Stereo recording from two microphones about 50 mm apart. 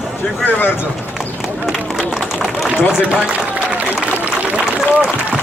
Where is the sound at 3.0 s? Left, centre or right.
Right.